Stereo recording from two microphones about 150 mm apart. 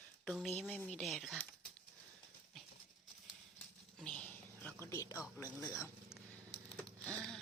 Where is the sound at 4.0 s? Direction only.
5° left (ahead or behind).